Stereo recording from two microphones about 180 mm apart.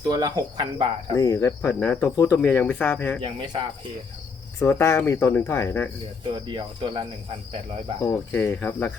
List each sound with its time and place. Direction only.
0.1 s cricket: 20° right (ahead or behind)
1.1 s speech: 20° left (ahead or behind)
3.2 s cricket: 25° right (ahead or behind)
4.6 s speech: 15° left (ahead or behind)
6.3 s cricket: 30° right (ahead or behind)
8.0 s speech: 10° left (ahead or behind)